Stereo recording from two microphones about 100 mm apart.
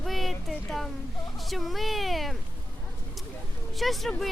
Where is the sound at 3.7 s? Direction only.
Centre (ahead or behind).